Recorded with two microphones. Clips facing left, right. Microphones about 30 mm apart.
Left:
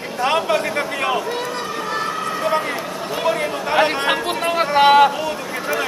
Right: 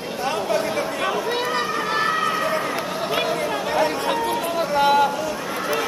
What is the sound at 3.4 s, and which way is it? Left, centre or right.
Chatter, left.